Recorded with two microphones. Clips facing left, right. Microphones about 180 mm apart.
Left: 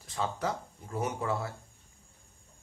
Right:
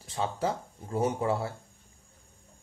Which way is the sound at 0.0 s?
30° right (ahead or behind).